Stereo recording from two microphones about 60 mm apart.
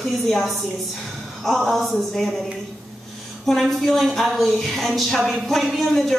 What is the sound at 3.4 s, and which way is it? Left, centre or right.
A woman's voice, centre.